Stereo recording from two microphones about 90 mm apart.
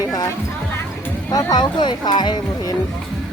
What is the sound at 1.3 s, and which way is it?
Music, 45° left (ahead or behind).